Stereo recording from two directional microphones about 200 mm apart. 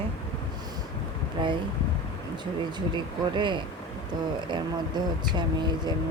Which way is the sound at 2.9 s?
25° right (ahead or behind).